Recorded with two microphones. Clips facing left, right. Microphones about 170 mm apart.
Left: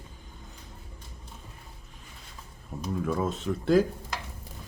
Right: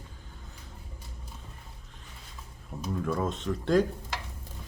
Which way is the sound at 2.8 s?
5° left (ahead or behind).